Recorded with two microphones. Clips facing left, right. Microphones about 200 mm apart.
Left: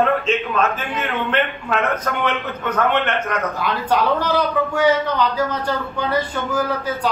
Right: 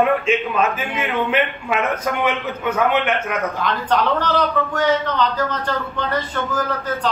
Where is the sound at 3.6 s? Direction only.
10° left (ahead or behind).